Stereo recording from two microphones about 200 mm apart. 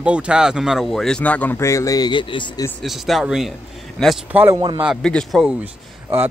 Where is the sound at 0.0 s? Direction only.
5° right (ahead or behind); by 2.7 s 20° left (ahead or behind).